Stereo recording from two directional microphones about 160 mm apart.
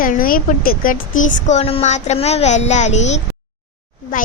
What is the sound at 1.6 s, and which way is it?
A child's voice, 40° left (ahead or behind).